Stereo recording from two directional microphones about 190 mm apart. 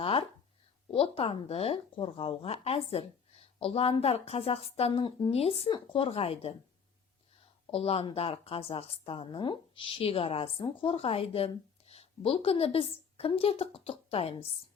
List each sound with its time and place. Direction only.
0.0 s a sound: 30° left (ahead or behind)
0.9 s a woman's voice: 30° left (ahead or behind)
7.7 s a woman's voice: 30° left (ahead or behind)